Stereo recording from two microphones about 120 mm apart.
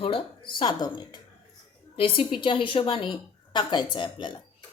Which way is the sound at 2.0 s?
50° left (ahead or behind).